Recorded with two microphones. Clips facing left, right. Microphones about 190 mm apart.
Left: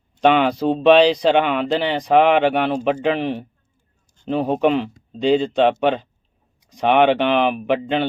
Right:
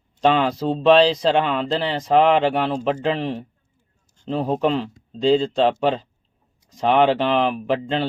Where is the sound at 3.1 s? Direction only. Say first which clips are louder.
Left 3 dB; 65° left (ahead or behind).